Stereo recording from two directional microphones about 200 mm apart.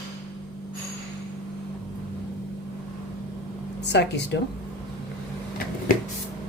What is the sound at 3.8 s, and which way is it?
Speech, 60° left (ahead or behind).